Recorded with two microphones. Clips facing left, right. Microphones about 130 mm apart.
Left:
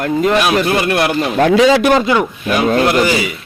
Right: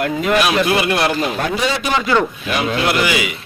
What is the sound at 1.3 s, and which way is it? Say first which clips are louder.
Speech: left 10 dB; 80° left.